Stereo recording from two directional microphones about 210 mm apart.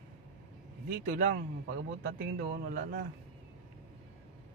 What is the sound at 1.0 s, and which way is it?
A man's voice, 40° right (ahead or behind).